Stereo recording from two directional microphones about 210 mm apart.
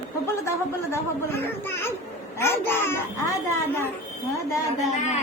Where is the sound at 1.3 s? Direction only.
10° left (ahead or behind).